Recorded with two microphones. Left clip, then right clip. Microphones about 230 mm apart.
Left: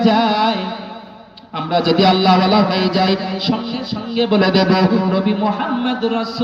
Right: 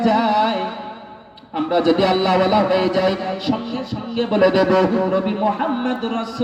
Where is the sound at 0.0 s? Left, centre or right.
Left.